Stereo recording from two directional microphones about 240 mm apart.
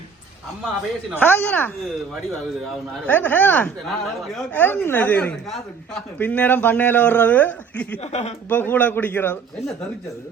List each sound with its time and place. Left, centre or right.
1.1 s speech: centre
8.0 s speech: left
8.4 s speech: centre